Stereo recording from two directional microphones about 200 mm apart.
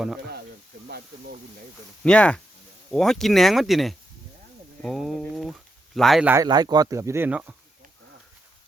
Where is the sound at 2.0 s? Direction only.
5° left (ahead or behind).